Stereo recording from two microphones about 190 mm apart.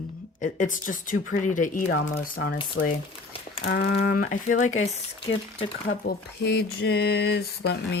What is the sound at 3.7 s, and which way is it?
Speech, 55° left (ahead or behind).